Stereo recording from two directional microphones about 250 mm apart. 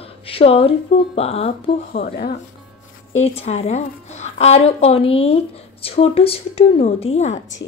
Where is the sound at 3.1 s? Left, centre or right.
Left.